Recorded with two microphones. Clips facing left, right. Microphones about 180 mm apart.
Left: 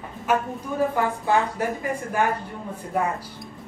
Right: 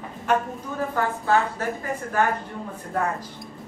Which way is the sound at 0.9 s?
15° left (ahead or behind).